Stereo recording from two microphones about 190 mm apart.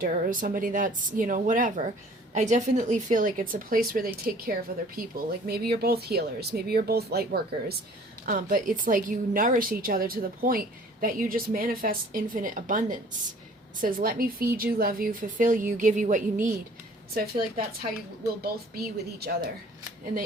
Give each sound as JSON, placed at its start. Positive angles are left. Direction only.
{"t": 0.0, "sound": "speech", "side_deg": -45}
{"t": 17.2, "sound": "speech", "side_deg": -50}